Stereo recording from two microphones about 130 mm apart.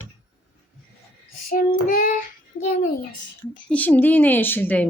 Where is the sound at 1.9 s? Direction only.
90° left.